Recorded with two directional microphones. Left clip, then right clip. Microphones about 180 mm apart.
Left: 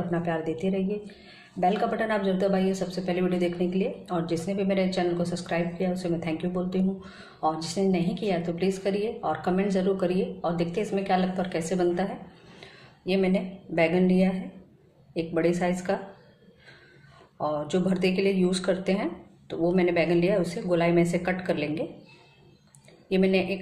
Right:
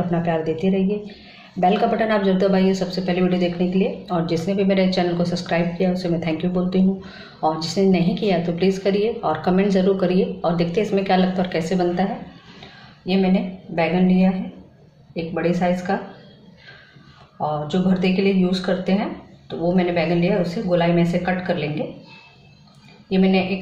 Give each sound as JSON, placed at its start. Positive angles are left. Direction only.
{"t": 0.1, "sound": "a woman's voice", "side_deg": 5}
{"t": 11.7, "sound": "a woman's voice", "side_deg": 15}
{"t": 13.0, "sound": "a woman's voice", "side_deg": 35}
{"t": 17.6, "sound": "a woman's voice", "side_deg": 40}
{"t": 23.0, "sound": "a woman's voice", "side_deg": 35}